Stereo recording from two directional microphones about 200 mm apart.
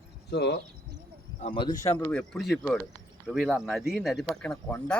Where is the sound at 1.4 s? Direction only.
25° left (ahead or behind).